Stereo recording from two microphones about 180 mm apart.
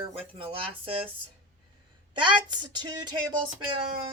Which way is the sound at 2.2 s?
25° right (ahead or behind).